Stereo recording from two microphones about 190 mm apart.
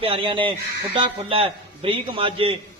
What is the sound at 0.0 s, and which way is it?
A man's voice, 30° right (ahead or behind).